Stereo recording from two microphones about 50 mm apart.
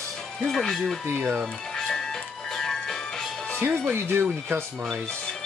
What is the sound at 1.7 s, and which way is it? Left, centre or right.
Music, centre.